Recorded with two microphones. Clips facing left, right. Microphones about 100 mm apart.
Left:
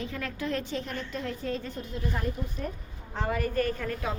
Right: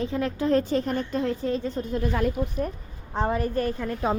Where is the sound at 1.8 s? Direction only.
50° right (ahead or behind).